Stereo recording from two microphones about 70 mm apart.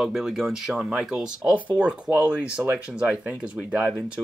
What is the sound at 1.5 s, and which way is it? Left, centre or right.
Speech, centre.